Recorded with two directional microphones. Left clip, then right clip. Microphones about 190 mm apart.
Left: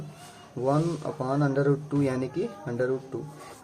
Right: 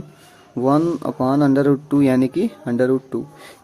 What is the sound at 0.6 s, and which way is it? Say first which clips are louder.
Speech: right 9 dB; 45° right (ahead or behind).